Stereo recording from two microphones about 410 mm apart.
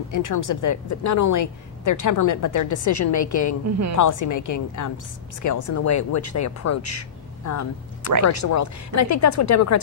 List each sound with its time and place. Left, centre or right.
0.1 s a woman's voice: left